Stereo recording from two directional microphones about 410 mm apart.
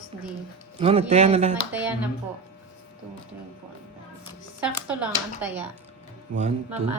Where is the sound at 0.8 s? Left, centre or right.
Centre.